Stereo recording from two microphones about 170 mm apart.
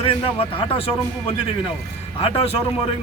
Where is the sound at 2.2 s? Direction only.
35° left (ahead or behind).